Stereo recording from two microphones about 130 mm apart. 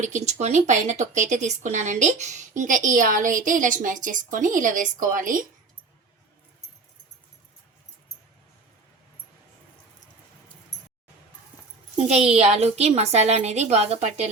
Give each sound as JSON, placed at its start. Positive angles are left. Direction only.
{"t": 0.0, "sound": "speech", "side_deg": -65}
{"t": 11.9, "sound": "a woman's voice", "side_deg": -55}